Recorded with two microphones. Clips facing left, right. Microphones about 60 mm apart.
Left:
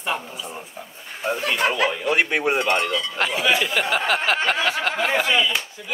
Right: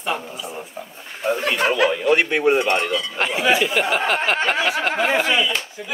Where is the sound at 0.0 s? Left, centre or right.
Centre.